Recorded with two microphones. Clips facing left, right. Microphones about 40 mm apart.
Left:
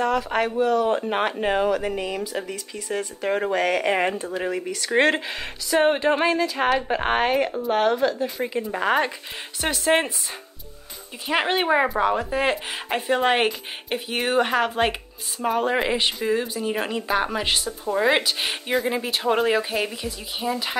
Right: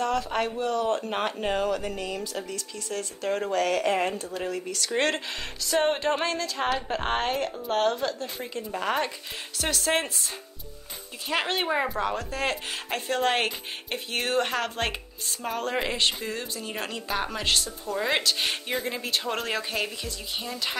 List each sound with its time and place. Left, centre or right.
0.0 s a woman's voice: centre
4.6 s a woman's voice: centre
11.2 s a woman's voice: centre